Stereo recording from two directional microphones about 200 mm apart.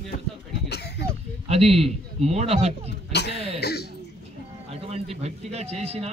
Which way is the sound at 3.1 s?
55° left (ahead or behind).